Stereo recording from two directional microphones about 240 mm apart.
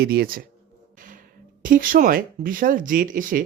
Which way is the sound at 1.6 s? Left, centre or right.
Right.